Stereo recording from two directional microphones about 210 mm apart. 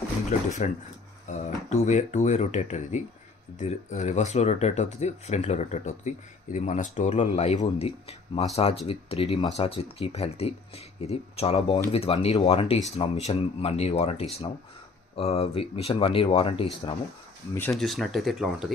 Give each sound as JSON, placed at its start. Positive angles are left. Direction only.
{"t": 0.6, "sound": "speech", "side_deg": 35}
{"t": 17.6, "sound": "speech", "side_deg": 5}